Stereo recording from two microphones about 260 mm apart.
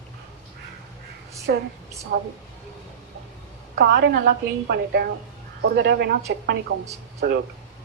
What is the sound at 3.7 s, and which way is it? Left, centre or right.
A woman's voice, right.